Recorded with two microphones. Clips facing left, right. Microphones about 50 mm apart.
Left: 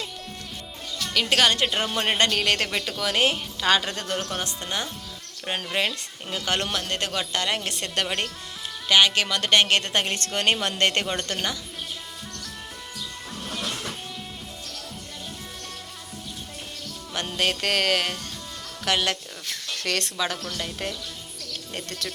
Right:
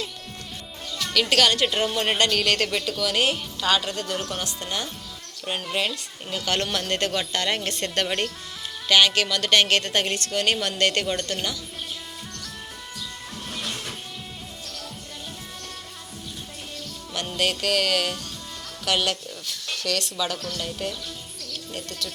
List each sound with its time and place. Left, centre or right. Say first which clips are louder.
1.1 s a woman's voice: right 1 dB; centre
1.6 s speech: right 2 dB; centre
2.1 s a woman's voice: even; left
3.8 s a woman's voice: even; left
4.3 s a woman's voice: even; left
6.7 s speech: right 2 dB; centre
8.9 s a woman's voice: even; centre
10.2 s a woman's voice: even; left
17.2 s a woman's voice: even; left
19.0 s speech: even; left
20.1 s a woman's voice: even; left
21.8 s speech: even; left